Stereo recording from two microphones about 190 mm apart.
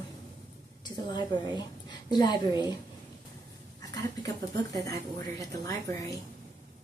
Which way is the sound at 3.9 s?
20° left (ahead or behind).